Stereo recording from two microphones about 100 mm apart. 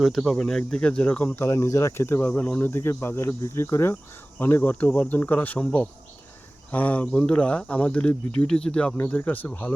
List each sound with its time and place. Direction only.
0.0 s speech: centre (ahead or behind)
1.4 s speech: 30° left (ahead or behind)